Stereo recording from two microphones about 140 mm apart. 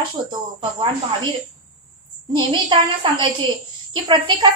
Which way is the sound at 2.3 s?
35° right (ahead or behind).